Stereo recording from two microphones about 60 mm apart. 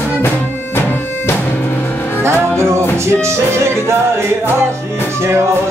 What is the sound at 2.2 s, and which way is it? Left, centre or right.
Music, right.